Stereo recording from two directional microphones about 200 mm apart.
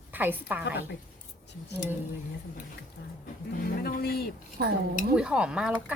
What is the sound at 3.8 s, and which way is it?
Speech, 50° left (ahead or behind).